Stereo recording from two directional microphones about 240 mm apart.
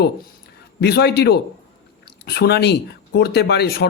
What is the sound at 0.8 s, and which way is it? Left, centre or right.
Speech, left.